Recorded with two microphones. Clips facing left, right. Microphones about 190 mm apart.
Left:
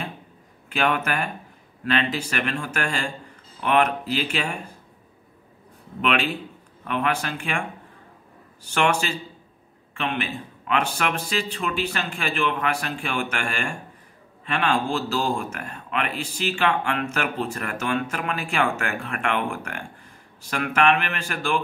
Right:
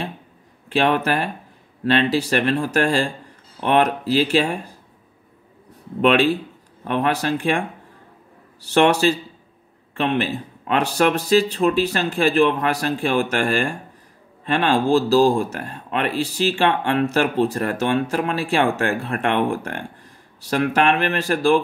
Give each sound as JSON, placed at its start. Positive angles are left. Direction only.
{"t": 0.7, "sound": "speech", "side_deg": -35}
{"t": 5.9, "sound": "speech", "side_deg": -35}